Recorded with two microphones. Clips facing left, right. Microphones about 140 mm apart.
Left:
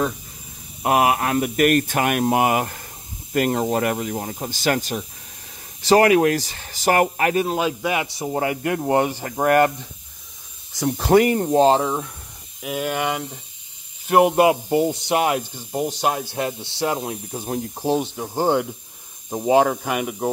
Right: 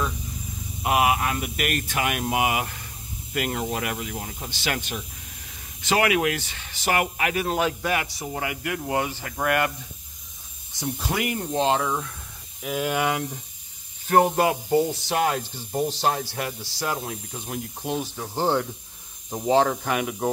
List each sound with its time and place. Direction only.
0.8 s speech: 45° left (ahead or behind)
7.5 s speech: 15° left (ahead or behind)
8.2 s speech: 35° left (ahead or behind)
10.8 s speech: 70° left (ahead or behind)
11.1 s speech: 45° left (ahead or behind); by 12.1 s 25° left (ahead or behind)
12.6 s speech: centre (ahead or behind)
14.3 s speech: 20° left (ahead or behind)
17.9 s speech: 20° left (ahead or behind)